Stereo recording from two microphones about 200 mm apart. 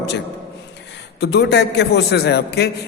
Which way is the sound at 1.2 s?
55° left (ahead or behind).